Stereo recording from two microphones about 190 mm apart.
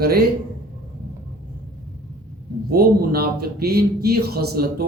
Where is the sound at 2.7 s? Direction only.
55° right (ahead or behind).